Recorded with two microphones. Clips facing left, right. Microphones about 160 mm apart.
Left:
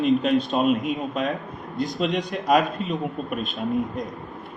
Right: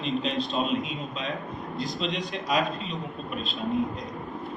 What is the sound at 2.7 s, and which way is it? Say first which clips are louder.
Speech: left 7 dB; 50° left (ahead or behind).